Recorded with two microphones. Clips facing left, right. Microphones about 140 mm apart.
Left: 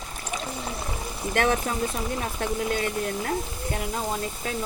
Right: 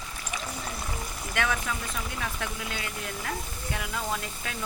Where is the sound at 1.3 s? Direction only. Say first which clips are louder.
Left 6 dB; 40° left (ahead or behind).